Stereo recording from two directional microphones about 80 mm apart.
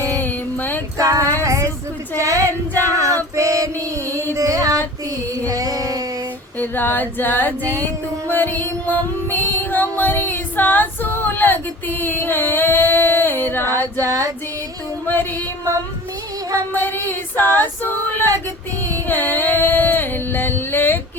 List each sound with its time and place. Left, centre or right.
0.2 s mantra: left
0.9 s female singing: right
1.4 s a sound: right
2.8 s female singing: right
3.3 s music: right
4.4 s female singing: right
5.3 s child singing: right
6.6 s music: left
14.0 s female singing: right
15.0 s music: left
16.7 s music: left
18.9 s music: left